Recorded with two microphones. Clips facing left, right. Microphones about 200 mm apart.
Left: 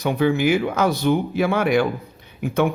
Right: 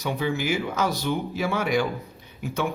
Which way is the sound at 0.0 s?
60° left (ahead or behind).